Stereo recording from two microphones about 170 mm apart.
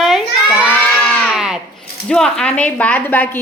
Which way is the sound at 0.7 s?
Centre (ahead or behind).